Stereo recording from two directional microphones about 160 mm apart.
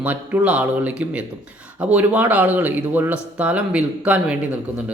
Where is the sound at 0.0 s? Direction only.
10° right (ahead or behind).